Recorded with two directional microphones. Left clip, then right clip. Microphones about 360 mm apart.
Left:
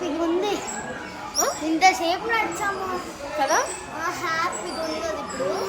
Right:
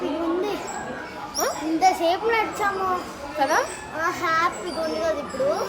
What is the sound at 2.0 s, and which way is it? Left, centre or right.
Speech, right.